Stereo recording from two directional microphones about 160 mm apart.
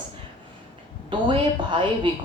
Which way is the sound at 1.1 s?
30° right (ahead or behind).